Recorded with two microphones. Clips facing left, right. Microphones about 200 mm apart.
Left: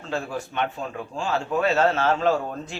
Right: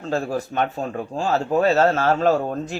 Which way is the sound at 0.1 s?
40° right (ahead or behind).